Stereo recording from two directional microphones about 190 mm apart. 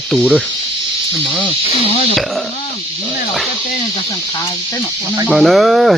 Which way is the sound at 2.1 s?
Centre (ahead or behind).